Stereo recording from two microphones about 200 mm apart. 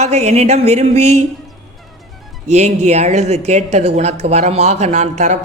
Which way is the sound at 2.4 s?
35° right (ahead or behind).